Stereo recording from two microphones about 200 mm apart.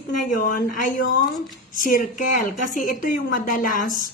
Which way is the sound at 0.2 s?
40° left (ahead or behind).